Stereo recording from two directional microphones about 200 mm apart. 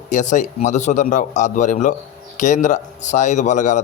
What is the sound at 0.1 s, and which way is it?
A man's voice, 40° left (ahead or behind).